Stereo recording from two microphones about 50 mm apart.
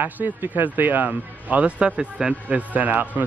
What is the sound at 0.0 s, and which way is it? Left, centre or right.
Speech, right.